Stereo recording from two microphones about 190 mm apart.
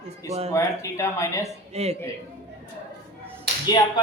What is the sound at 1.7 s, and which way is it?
Speech, 35° right (ahead or behind).